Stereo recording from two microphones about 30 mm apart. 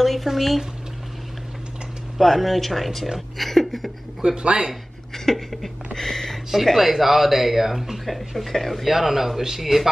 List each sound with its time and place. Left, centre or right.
0.0 s speech: centre
2.1 s speech: centre
3.3 s a sound: centre
4.4 s speech: right
5.1 s a sound: centre
6.6 s speech: centre
8.0 s speech: centre
8.8 s speech: centre